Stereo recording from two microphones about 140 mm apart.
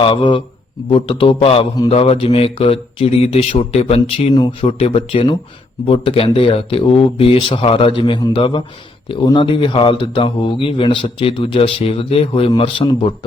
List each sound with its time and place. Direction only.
0.0 s speech: 35° left (ahead or behind)